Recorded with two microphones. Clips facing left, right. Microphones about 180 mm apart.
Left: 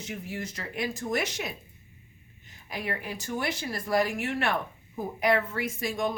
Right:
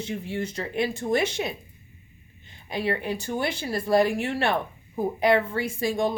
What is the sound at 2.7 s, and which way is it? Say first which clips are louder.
A woman's voice: right 7 dB; 30° right (ahead or behind).